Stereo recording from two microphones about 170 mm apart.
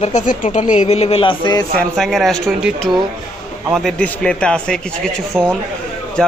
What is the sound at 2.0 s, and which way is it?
Speech, centre (ahead or behind).